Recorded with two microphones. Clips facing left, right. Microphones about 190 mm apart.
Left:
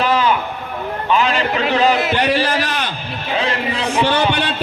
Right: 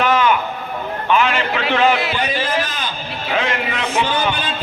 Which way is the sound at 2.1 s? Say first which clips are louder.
Left 4 dB; 75° left (ahead or behind).